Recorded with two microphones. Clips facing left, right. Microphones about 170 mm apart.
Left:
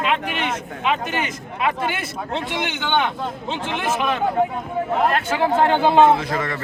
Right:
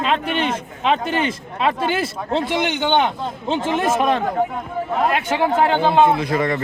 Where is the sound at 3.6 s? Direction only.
40° right (ahead or behind).